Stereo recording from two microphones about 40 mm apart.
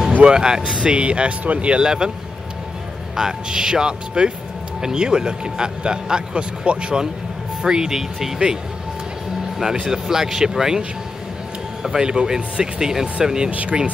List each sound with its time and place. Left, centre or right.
0.2 s speech: centre; by 1.8 s right
1.8 s speech: centre
3.2 s speech: centre
9.8 s speech: centre
11.8 s speech: centre
13.5 s speech: right